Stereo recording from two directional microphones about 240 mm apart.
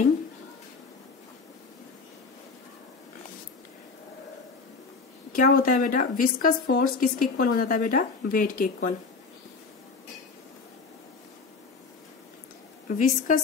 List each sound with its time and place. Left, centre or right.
5.3 s a woman's voice: left
12.8 s a woman's voice: left